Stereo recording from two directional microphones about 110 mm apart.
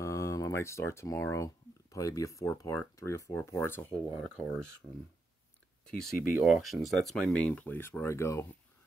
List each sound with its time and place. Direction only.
0.0 s speech: 30° left (ahead or behind)
4.2 s speech: 5° left (ahead or behind)
5.9 s speech: 5° left (ahead or behind); by 8.5 s 25° left (ahead or behind)